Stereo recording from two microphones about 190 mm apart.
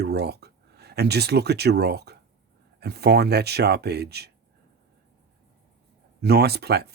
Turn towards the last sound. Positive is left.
turn(degrees=-55)  # may be behind; listen again after turning